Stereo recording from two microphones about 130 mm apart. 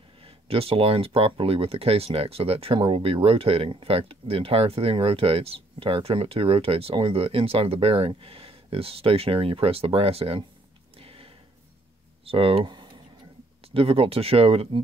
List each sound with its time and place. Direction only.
0.2 s speech: 45° right (ahead or behind)
11.0 s a sound: 45° right (ahead or behind)
12.3 s speech: 45° right (ahead or behind)